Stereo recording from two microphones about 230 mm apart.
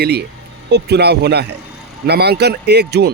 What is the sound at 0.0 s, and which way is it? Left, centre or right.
Speech, right.